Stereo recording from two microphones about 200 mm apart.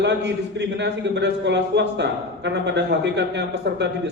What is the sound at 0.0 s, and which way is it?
A man's voice, 60° right (ahead or behind).